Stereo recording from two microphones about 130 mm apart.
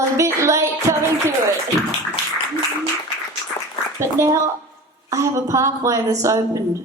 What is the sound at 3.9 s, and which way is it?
A woman's voice, 20° right (ahead or behind).